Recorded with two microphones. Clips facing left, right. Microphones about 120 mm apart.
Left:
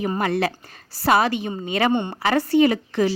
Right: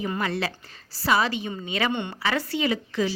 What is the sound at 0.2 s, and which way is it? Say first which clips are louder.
A woman's voice: left 6 dB; 50° left (ahead or behind).